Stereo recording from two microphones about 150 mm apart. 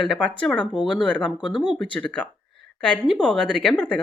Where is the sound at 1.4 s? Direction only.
30° left (ahead or behind).